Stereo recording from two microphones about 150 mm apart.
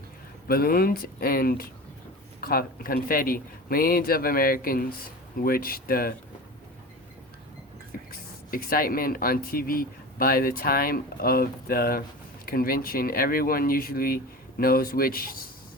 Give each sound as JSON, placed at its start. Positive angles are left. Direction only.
{"t": 0.4, "sound": "speech", "side_deg": 80}
{"t": 7.9, "sound": "a sound", "side_deg": 70}
{"t": 8.4, "sound": "speech", "side_deg": 75}